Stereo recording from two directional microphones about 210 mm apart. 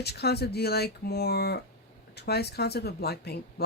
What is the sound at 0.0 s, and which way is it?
Speech, 50° left (ahead or behind).